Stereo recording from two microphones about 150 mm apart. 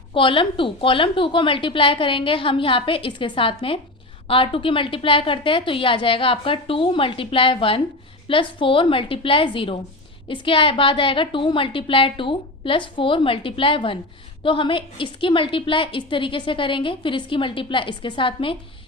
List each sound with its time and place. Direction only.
0.1 s a woman's voice: 35° left (ahead or behind)